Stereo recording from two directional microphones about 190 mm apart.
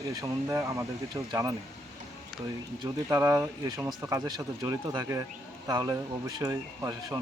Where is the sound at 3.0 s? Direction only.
15° right (ahead or behind).